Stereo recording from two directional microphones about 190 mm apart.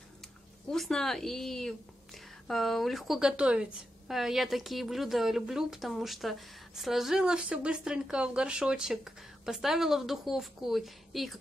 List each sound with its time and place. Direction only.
0.7 s a woman's voice: centre (ahead or behind)